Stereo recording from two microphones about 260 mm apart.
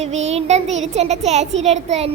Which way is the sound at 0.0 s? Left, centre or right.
Right.